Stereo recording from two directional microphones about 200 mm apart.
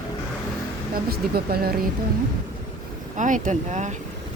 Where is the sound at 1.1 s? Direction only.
50° right (ahead or behind).